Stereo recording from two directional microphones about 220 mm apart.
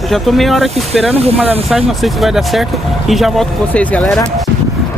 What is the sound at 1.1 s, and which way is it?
Speech, 25° right (ahead or behind).